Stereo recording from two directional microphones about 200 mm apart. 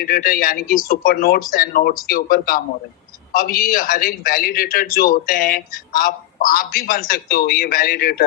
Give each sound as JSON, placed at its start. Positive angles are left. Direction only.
{"t": 0.0, "sound": "a man's voice", "side_deg": 45}